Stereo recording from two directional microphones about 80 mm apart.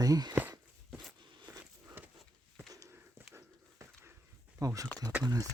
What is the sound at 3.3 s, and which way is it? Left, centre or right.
Dog, right.